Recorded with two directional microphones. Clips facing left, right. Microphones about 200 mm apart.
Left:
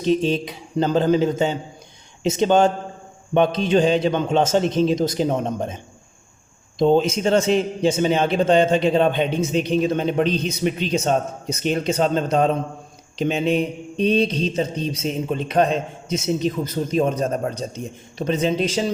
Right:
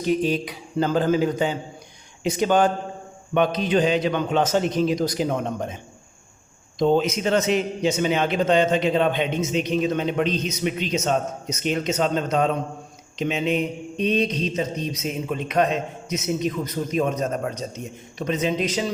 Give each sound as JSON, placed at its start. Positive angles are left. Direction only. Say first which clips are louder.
{"t": 0.0, "sound": "a man's voice", "louder": "left 2 dB", "side_deg": 25}
{"t": 6.7, "sound": "a man's voice", "louder": "left 3 dB", "side_deg": 30}